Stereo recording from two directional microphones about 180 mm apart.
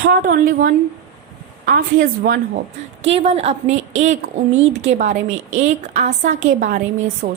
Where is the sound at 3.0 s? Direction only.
35° right (ahead or behind).